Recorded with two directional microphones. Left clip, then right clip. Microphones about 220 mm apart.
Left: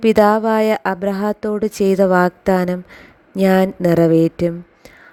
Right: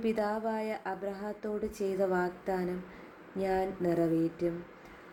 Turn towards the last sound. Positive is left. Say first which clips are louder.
# left 16 dB
turn(degrees=50)  # may be behind; listen again after turning